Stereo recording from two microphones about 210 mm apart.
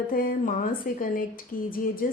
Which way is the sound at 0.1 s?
45° left (ahead or behind).